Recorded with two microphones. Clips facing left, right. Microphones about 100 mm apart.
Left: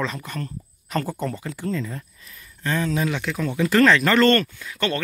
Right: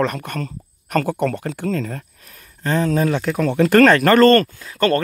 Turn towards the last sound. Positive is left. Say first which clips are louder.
# right 8 dB
turn(degrees=-45)  # may be behind; listen again after turning